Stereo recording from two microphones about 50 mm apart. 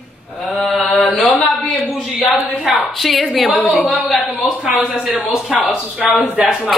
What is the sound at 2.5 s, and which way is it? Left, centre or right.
A woman's voice, centre.